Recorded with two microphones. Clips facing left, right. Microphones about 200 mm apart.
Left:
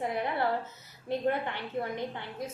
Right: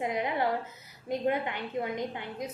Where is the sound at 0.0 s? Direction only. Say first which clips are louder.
Right 1 dB; 15° right (ahead or behind).